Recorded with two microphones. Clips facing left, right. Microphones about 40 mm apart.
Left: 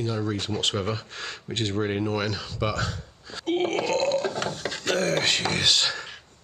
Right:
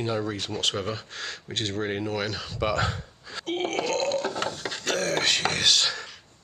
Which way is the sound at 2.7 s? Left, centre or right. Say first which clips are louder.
Right 3 dB; right.